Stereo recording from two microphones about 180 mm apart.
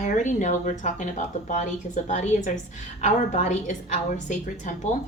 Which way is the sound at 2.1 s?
40° left (ahead or behind).